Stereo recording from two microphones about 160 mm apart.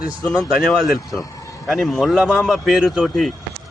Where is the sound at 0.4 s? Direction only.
Centre (ahead or behind).